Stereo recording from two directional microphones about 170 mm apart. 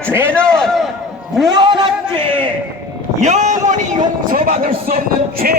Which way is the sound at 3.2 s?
45° right (ahead or behind).